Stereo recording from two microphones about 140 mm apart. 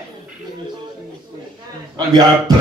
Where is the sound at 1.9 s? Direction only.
30° right (ahead or behind).